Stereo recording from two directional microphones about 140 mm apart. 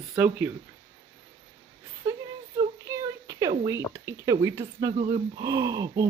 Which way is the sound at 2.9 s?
25° right (ahead or behind).